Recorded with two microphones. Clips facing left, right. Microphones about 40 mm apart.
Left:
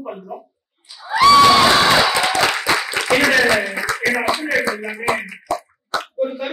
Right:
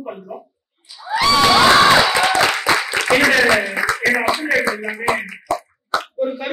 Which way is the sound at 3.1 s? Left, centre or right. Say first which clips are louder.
Right 1 dB; centre.